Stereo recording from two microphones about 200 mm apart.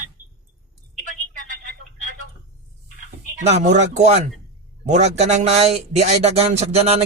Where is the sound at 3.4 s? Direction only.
35° right (ahead or behind).